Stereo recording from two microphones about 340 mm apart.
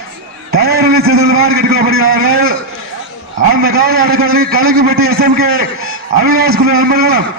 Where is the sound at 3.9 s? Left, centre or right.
Right.